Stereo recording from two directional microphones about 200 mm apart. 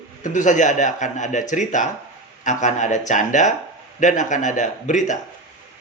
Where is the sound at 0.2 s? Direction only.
40° left (ahead or behind).